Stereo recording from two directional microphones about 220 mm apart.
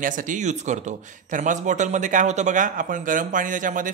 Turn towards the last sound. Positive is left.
turn(degrees=-35)  # may be behind; listen again after turning